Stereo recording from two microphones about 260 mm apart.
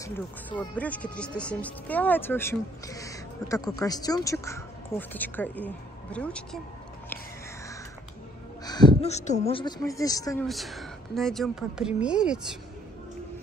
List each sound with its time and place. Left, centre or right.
0.0 s speech: centre
8.6 s speech: centre
10.4 s a woman's voice: centre